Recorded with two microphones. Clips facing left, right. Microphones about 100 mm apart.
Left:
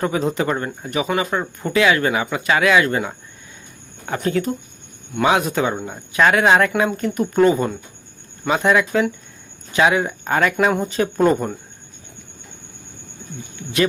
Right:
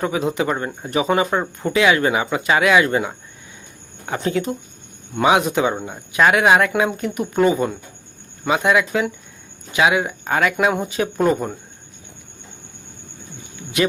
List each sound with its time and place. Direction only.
0.0 s speech: 10° right (ahead or behind)
0.9 s speech: 30° right (ahead or behind)
4.2 s speech: 20° right (ahead or behind)